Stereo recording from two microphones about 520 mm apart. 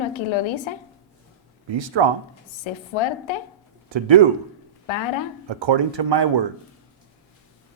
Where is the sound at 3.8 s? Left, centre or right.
Right.